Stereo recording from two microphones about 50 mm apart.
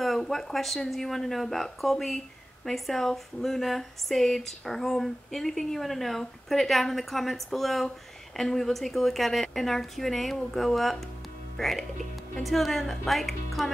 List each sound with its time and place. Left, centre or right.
0.0 s speech: centre